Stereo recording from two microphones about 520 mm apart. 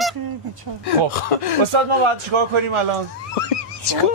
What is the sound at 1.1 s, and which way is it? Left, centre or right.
Snicker, left.